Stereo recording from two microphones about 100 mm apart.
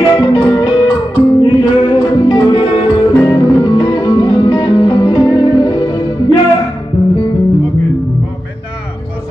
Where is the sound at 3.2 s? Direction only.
45° left (ahead or behind).